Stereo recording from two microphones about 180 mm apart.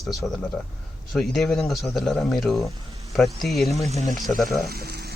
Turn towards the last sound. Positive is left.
turn(degrees=-65)  # may be behind; listen again after turning